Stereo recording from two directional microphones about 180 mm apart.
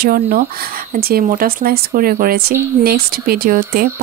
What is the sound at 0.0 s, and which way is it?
Speech, 55° right (ahead or behind).